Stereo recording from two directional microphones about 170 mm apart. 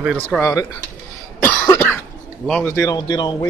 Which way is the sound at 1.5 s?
10° left (ahead or behind).